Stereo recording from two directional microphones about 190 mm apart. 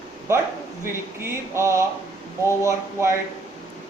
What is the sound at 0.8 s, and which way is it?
Speech, 15° right (ahead or behind).